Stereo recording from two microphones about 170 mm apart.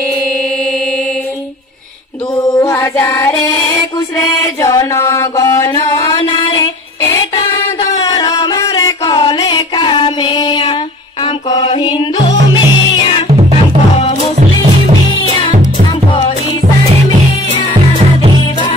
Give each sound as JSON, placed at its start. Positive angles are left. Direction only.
{"t": 2.5, "sound": "music", "side_deg": 20}
{"t": 4.4, "sound": "mantra", "side_deg": 20}
{"t": 7.1, "sound": "music", "side_deg": 20}